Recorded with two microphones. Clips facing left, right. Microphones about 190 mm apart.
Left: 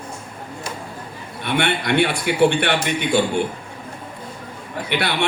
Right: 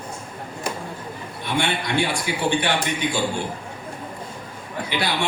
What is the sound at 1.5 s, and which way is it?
A man's voice, 60° left (ahead or behind).